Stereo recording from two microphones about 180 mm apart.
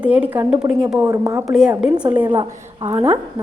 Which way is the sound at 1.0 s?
15° right (ahead or behind).